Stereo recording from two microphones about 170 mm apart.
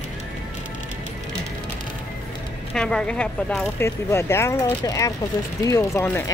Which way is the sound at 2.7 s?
5° left (ahead or behind).